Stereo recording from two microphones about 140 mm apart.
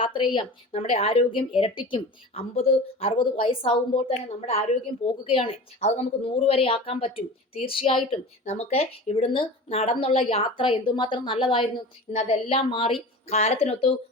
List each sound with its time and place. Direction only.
0.0 s a woman's voice: 35° left (ahead or behind)